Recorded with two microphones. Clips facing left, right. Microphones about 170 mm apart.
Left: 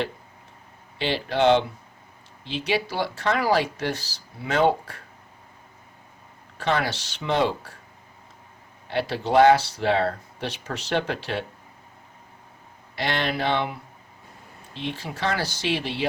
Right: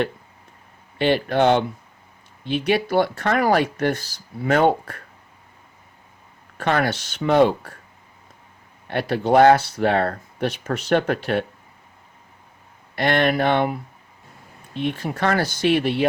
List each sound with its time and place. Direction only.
0.9 s speech: 55° right (ahead or behind)
6.6 s speech: 55° right (ahead or behind)
8.9 s speech: 55° right (ahead or behind)
13.0 s speech: 55° right (ahead or behind)